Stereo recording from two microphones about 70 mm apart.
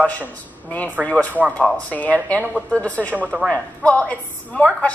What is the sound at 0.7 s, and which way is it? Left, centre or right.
A woman's voice, left.